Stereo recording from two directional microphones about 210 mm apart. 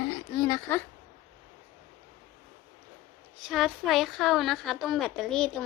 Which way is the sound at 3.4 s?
Centre (ahead or behind).